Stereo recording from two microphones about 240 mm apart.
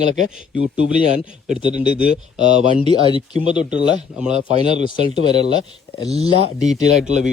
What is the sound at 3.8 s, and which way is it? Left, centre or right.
Speech, left.